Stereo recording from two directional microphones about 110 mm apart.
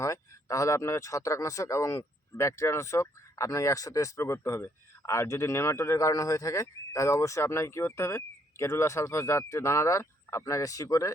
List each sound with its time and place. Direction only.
0.0 s speech: 30° left (ahead or behind)